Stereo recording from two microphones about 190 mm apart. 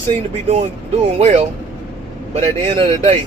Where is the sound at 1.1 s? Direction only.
35° right (ahead or behind).